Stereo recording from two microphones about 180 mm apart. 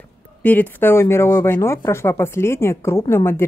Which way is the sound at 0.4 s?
10° left (ahead or behind).